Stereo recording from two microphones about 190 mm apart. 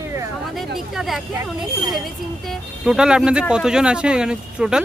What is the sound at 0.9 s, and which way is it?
Speech, centre (ahead or behind).